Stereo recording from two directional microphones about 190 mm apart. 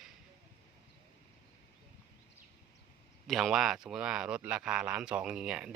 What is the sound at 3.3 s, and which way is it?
Speech, centre (ahead or behind).